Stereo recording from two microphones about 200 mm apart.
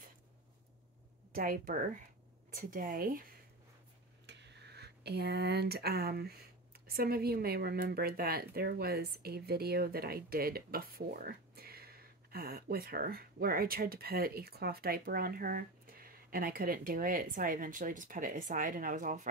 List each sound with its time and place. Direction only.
1.3 s speech: 45° right (ahead or behind)
4.3 s speech: 60° right (ahead or behind); by 19.2 s 40° right (ahead or behind)